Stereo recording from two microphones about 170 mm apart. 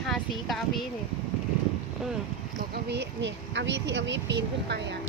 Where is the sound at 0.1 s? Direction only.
Centre (ahead or behind).